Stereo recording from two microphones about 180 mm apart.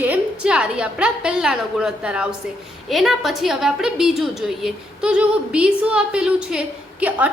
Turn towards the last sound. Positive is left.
turn(degrees=-10)  # may be behind; listen again after turning